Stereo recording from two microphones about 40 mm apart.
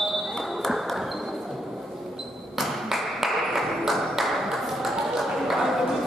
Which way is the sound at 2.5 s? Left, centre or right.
Centre.